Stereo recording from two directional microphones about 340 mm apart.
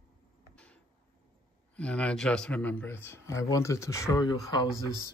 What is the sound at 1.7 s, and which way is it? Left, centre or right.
Speech, centre.